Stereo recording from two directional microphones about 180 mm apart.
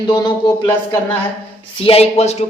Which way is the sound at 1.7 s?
30° left (ahead or behind).